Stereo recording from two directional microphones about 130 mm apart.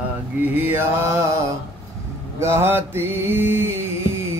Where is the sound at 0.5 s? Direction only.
15° right (ahead or behind).